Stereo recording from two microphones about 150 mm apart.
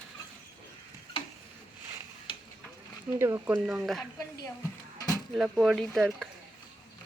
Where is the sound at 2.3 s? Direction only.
35° left (ahead or behind).